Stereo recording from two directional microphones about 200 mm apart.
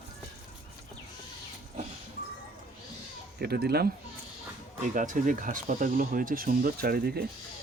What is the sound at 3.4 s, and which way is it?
Speech, 55° right (ahead or behind).